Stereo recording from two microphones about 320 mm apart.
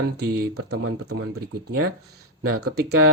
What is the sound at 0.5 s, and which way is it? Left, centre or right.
Speech, right.